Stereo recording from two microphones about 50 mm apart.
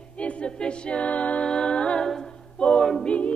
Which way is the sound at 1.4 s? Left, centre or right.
Centre.